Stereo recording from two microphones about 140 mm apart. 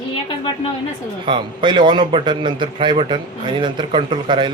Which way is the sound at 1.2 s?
35° right (ahead or behind).